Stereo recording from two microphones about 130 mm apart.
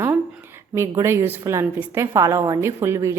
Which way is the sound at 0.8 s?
20° right (ahead or behind).